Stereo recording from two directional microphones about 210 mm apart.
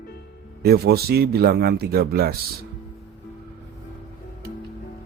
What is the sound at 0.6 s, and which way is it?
A man's voice, 50° right (ahead or behind).